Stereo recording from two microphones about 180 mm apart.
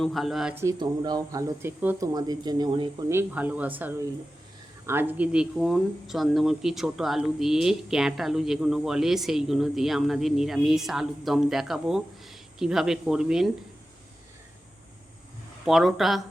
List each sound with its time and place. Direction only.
0.0 s speech: centre (ahead or behind)
0.5 s speech: 15° right (ahead or behind)
3.1 s speech: 10° right (ahead or behind)
15.6 s speech: centre (ahead or behind)